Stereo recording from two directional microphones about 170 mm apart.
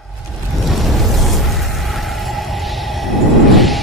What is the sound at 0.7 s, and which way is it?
Music, centre (ahead or behind).